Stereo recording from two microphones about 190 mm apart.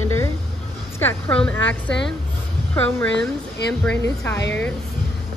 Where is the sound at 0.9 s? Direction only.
10° left (ahead or behind).